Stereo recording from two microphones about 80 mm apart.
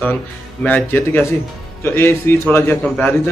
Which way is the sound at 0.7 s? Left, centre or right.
Left.